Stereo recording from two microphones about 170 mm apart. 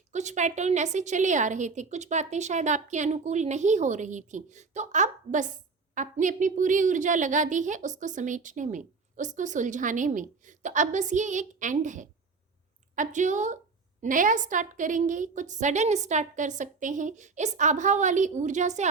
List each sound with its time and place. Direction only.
0.1 s a woman's voice: 45° right (ahead or behind)